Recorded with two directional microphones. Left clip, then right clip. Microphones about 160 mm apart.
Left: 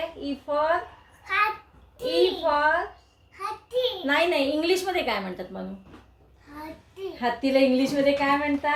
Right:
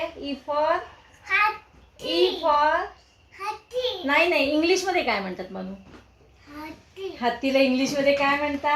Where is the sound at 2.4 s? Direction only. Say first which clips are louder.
Right 2 dB; 15° right (ahead or behind).